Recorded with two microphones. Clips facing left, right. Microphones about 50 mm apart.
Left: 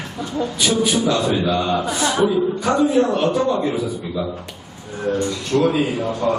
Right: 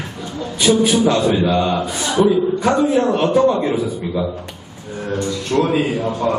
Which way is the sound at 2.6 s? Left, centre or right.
Right.